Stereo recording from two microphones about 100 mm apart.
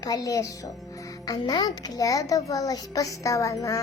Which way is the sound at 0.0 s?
40° left (ahead or behind).